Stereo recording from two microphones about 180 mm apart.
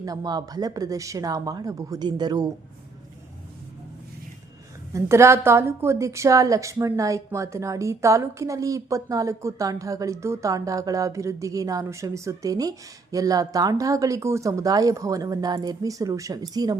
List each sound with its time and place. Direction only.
0.0 s speech: 20° right (ahead or behind)
4.9 s a woman's voice: 15° right (ahead or behind)